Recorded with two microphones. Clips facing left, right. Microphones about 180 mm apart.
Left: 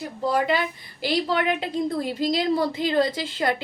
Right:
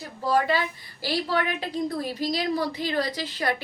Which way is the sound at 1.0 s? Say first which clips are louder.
Left 3 dB; 20° left (ahead or behind).